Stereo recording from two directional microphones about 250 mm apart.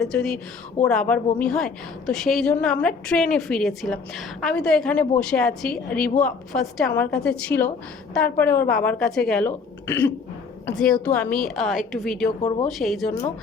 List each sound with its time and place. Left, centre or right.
0.0 s a woman's voice: centre
12.4 s a woman's voice: centre
12.8 s a woman's voice: centre